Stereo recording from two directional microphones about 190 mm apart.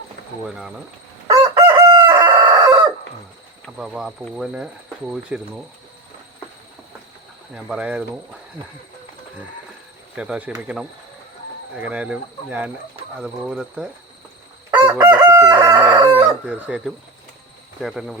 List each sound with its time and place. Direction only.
0.4 s speech: 5° right (ahead or behind)
1.3 s chicken: 20° right (ahead or behind)
3.8 s speech: 5° right (ahead or behind)
7.5 s speech: 5° right (ahead or behind)
10.2 s speech: 5° right (ahead or behind)
14.8 s chicken: 15° right (ahead or behind)
16.1 s speech: 10° right (ahead or behind)